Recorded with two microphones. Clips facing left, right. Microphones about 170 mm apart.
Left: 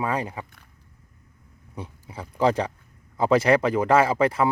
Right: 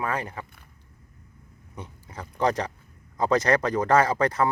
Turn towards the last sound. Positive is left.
turn(degrees=5)  # may be behind; listen again after turning